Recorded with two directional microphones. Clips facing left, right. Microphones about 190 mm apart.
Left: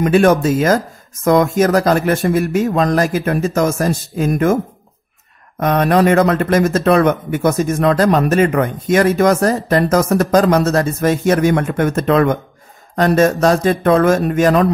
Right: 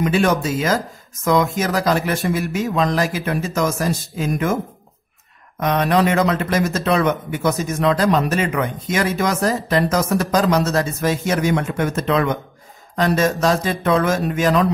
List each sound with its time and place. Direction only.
0.0 s speech: 50° left (ahead or behind)
5.6 s speech: 50° left (ahead or behind)